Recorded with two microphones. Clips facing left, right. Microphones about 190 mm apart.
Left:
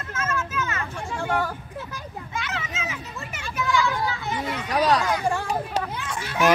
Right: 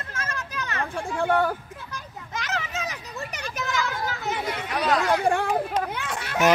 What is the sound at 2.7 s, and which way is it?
Children playing, 40° right (ahead or behind).